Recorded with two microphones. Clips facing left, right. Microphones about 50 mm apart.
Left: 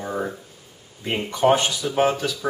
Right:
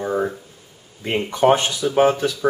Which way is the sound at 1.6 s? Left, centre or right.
Centre.